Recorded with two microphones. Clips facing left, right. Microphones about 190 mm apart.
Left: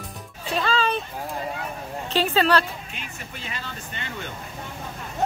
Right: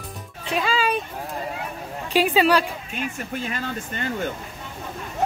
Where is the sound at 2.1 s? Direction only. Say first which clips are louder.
Right 2 dB; 10° right (ahead or behind).